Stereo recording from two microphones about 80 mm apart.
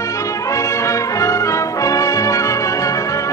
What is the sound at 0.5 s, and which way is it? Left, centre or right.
Brass instrument, left.